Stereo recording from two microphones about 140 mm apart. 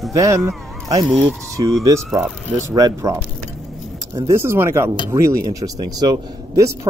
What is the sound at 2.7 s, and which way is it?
Speech, 25° right (ahead or behind).